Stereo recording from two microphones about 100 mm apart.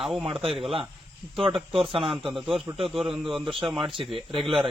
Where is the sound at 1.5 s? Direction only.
60° right (ahead or behind).